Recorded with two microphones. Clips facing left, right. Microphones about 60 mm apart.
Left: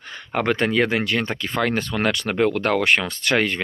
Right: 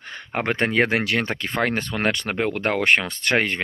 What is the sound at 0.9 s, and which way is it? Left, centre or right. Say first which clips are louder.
Speech: even; right.